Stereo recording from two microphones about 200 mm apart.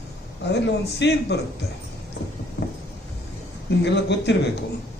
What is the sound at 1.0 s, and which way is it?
Speech, 60° left (ahead or behind).